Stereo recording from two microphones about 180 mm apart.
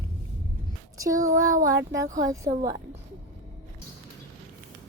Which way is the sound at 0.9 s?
20° right (ahead or behind).